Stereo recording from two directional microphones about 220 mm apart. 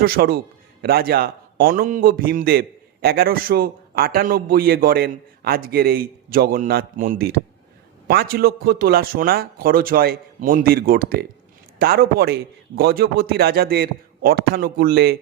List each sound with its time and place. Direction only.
0.0 s a man's voice: 40° right (ahead or behind)